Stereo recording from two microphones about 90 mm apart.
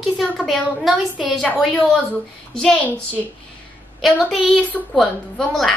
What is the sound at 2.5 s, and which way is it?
Speech, 5° left (ahead or behind).